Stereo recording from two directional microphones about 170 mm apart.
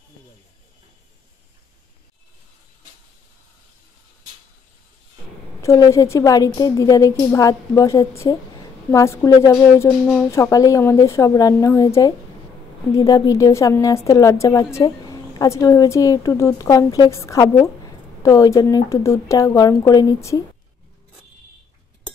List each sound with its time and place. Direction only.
5.6 s a woman's voice: 15° left (ahead or behind)